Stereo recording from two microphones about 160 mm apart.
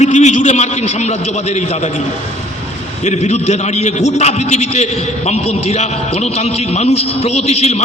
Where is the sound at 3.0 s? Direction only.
45° left (ahead or behind).